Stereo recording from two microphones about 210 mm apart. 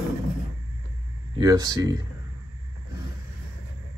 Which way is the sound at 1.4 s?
20° right (ahead or behind).